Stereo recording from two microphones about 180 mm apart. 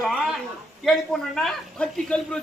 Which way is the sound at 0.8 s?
Centre (ahead or behind).